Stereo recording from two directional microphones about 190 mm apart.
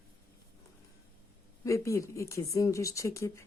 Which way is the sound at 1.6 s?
15° left (ahead or behind).